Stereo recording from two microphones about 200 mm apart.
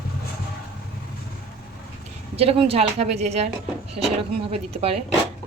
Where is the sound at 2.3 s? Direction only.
30° right (ahead or behind).